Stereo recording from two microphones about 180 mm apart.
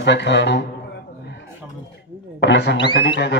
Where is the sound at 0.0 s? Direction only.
75° left (ahead or behind).